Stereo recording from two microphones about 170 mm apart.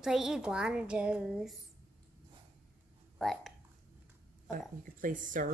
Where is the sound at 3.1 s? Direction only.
Centre (ahead or behind).